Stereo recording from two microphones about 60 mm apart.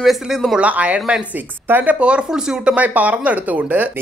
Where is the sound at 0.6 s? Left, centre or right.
Right.